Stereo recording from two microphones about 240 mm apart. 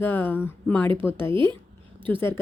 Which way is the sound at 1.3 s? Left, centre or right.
Centre.